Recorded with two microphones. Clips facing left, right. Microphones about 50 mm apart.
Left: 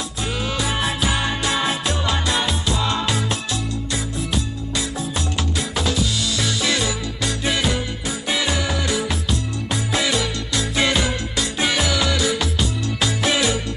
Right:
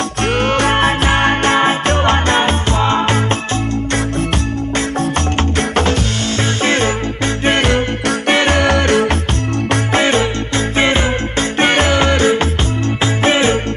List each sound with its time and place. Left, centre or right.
0.2 s music: right
5.6 s music: right
7.4 s music: right